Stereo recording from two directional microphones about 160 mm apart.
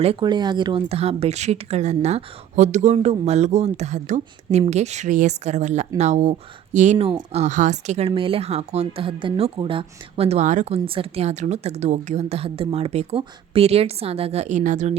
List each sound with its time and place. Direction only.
0.0 s speech: 35° right (ahead or behind)
7.1 s speech: 30° right (ahead or behind)
7.4 s speech: 50° right (ahead or behind)
10.8 s speech: 35° right (ahead or behind)